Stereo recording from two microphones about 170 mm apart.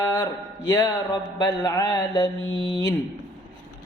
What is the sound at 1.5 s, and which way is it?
Mantra, 20° left (ahead or behind).